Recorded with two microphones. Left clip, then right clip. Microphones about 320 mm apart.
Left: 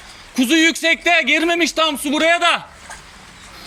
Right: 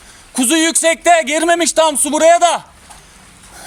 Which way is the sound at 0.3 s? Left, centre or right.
Right.